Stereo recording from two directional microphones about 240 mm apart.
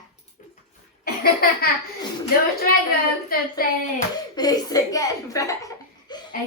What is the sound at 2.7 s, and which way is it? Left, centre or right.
Hands, left.